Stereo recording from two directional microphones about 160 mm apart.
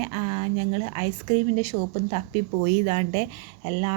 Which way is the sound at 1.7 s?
90° right.